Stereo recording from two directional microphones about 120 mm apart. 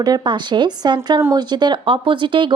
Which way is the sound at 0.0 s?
35° right (ahead or behind).